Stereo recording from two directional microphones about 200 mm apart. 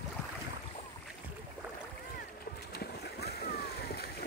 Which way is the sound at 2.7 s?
55° left (ahead or behind).